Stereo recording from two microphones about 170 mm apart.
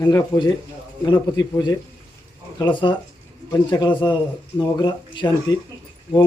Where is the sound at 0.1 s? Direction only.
20° left (ahead or behind).